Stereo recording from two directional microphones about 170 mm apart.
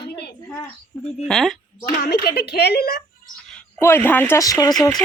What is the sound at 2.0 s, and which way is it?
Speech, 65° left (ahead or behind).